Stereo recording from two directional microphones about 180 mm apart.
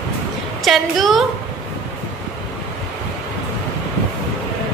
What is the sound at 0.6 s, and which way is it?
Speech, centre (ahead or behind).